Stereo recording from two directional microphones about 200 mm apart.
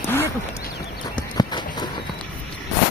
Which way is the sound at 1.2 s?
20° left (ahead or behind).